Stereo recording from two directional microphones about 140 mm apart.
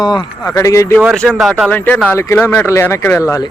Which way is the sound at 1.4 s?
5° right (ahead or behind).